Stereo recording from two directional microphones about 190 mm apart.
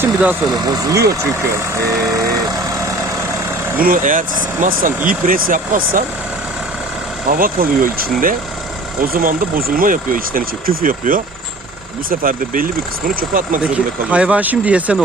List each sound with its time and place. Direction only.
0.0 s vehicle: 10° right (ahead or behind)
0.4 s speech: 20° right (ahead or behind)
1.2 s vehicle: 15° right (ahead or behind)
3.8 s speech: 50° right (ahead or behind)
7.3 s speech: 50° right (ahead or behind)
13.6 s speech: 5° right (ahead or behind)